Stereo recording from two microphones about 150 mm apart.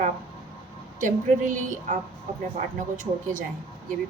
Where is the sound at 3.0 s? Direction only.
60° right (ahead or behind).